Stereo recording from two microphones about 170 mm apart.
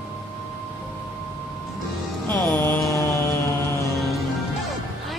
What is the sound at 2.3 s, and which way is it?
Mantra, 10° left (ahead or behind).